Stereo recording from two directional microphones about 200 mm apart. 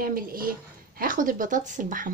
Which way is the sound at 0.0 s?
45° right (ahead or behind).